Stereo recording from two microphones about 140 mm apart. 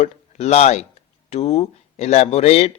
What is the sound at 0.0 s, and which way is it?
Speech, 45° left (ahead or behind).